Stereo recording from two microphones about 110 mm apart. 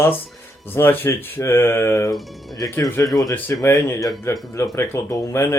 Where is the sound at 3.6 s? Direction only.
25° left (ahead or behind).